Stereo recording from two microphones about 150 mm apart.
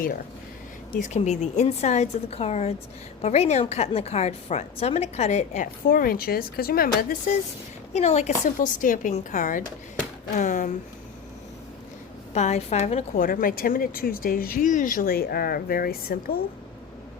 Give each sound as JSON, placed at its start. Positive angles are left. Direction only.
{"t": 1.0, "sound": "a woman's voice", "side_deg": 50}
{"t": 5.9, "sound": "speech", "side_deg": 75}
{"t": 7.9, "sound": "a woman's voice", "side_deg": 45}
{"t": 12.3, "sound": "a woman's voice", "side_deg": 50}